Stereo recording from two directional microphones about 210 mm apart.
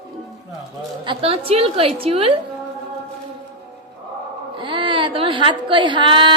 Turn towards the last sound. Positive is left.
turn(degrees=-20)  # may be behind; listen again after turning